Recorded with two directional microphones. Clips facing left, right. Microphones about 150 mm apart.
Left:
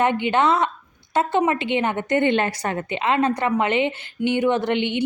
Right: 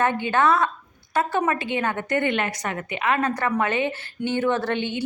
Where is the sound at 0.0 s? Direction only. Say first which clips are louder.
Left 2 dB; 20° left (ahead or behind).